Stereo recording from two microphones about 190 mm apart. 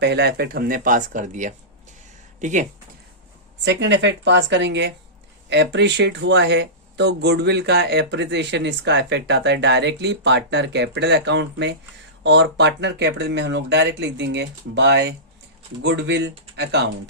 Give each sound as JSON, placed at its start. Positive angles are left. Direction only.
{"t": 0.0, "sound": "speech", "side_deg": -60}
{"t": 3.6, "sound": "a woman's voice", "side_deg": -70}